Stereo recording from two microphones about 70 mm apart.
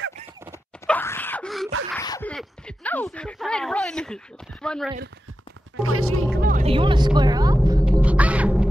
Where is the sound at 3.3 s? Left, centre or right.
Centre.